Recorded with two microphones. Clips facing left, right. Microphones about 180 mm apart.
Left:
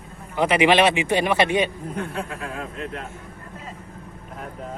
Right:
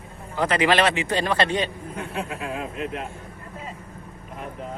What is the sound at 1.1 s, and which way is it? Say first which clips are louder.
Speech: left 3 dB; 10° left (ahead or behind).